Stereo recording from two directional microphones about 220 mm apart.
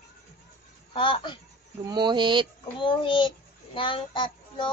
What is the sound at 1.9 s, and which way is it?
Speech, 20° right (ahead or behind).